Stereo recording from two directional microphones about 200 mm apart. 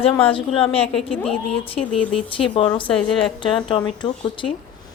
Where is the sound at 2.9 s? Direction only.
5° left (ahead or behind).